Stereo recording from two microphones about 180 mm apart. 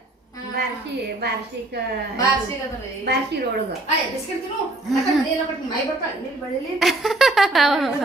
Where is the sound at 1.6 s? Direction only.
70° right (ahead or behind).